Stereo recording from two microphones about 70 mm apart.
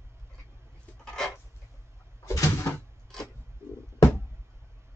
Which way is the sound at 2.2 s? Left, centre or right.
Left.